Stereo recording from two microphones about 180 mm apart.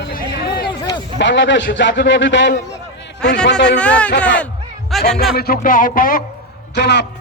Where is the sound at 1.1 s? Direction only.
80° left.